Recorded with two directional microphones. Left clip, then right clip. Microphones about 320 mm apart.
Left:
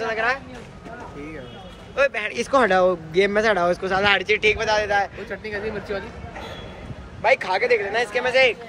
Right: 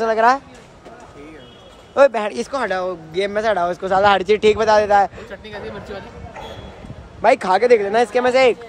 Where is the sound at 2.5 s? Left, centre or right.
Centre.